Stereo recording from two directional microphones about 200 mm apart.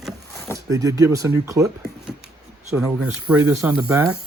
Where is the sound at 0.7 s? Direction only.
15° right (ahead or behind).